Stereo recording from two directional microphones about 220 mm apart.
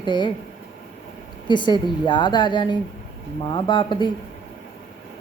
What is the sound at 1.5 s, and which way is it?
A woman's voice, 20° left (ahead or behind).